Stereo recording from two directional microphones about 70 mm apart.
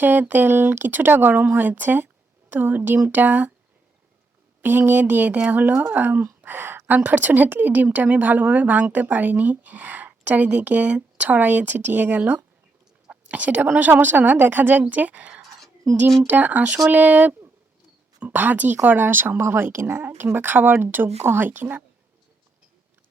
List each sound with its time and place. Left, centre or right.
0.0 s speech: right
4.6 s speech: right
13.1 s a sound: right
13.7 s speech: right